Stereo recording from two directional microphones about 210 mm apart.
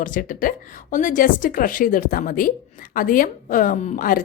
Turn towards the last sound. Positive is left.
turn(degrees=40)  # may be behind; listen again after turning